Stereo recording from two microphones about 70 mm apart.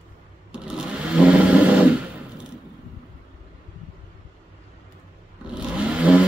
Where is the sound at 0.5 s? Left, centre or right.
Centre.